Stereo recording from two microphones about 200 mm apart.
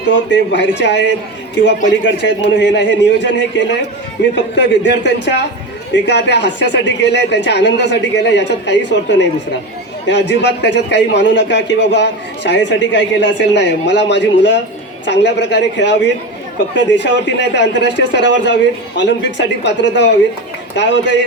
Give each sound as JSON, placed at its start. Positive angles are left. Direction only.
{"t": 0.3, "sound": "a man's voice", "side_deg": 60}